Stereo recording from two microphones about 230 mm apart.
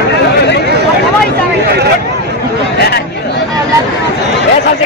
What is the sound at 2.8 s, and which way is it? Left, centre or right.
Chatter, left.